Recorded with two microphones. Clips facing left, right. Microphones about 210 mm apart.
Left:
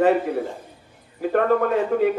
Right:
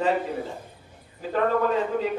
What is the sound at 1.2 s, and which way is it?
Speech, 60° left (ahead or behind).